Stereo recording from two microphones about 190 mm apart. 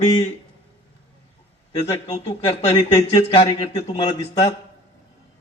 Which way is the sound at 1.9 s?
35° left (ahead or behind).